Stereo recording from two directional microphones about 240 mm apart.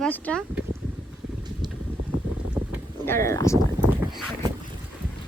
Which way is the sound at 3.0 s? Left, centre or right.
Centre.